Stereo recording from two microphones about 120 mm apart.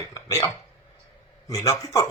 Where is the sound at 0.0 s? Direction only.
25° left (ahead or behind).